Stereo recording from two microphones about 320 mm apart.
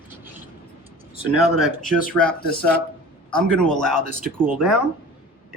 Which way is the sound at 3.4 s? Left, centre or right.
Centre.